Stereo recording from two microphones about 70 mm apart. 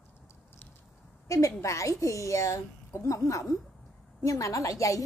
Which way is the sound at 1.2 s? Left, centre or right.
Left.